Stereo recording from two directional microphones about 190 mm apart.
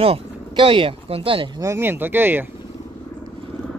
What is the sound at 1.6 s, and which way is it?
Speech, 15° right (ahead or behind).